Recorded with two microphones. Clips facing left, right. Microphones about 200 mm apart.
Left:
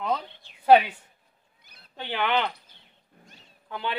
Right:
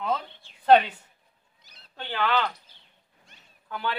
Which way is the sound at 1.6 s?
55° left (ahead or behind).